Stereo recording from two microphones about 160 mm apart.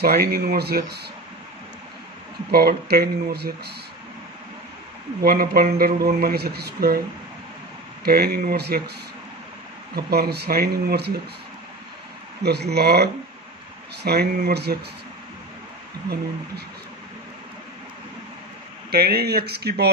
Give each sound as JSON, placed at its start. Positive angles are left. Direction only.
{"t": 0.0, "sound": "speech", "side_deg": -75}
{"t": 2.5, "sound": "speech", "side_deg": -75}
{"t": 5.2, "sound": "speech", "side_deg": -70}
{"t": 8.0, "sound": "speech", "side_deg": -75}
{"t": 9.9, "sound": "speech", "side_deg": -75}
{"t": 12.4, "sound": "speech", "side_deg": -90}
{"t": 18.9, "sound": "speech", "side_deg": -75}